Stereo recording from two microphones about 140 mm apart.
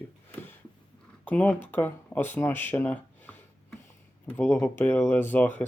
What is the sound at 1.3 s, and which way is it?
Speech, 10° left (ahead or behind).